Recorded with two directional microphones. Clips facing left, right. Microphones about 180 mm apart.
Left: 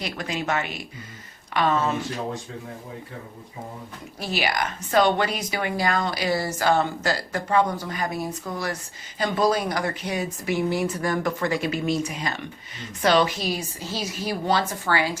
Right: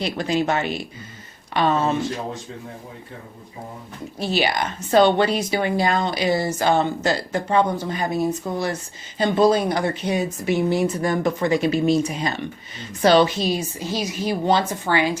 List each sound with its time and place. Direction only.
0.0 s speech: 30° right (ahead or behind)
4.2 s speech: 25° right (ahead or behind)